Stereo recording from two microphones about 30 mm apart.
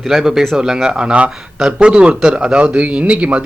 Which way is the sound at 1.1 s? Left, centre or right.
Right.